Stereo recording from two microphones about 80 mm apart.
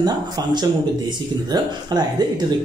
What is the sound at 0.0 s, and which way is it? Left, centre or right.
Speech, right.